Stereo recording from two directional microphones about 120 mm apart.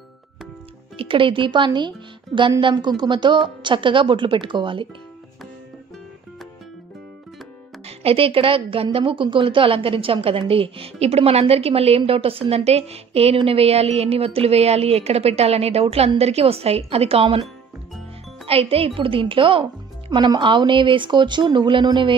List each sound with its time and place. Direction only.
0.9 s speech: 45° right (ahead or behind)
7.8 s a woman's voice: 55° right (ahead or behind)
18.5 s speech: 55° right (ahead or behind)